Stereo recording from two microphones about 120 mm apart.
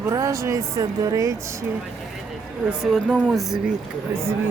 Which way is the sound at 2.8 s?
5° left (ahead or behind).